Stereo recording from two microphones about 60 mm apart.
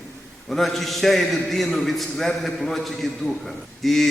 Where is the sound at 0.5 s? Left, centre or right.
Centre.